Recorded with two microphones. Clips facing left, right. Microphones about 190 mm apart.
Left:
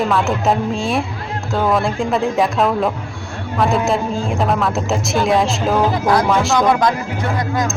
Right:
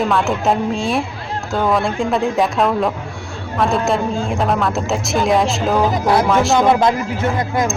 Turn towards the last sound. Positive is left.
turn(degrees=-25)  # may be behind; listen again after turning